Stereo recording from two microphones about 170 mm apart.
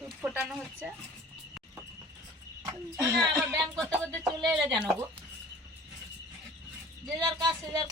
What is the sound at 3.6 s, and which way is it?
Music, centre (ahead or behind).